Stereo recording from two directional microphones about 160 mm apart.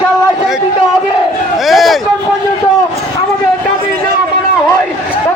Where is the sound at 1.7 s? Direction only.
Centre (ahead or behind).